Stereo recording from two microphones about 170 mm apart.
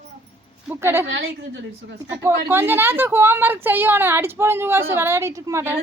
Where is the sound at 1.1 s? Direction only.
90° right.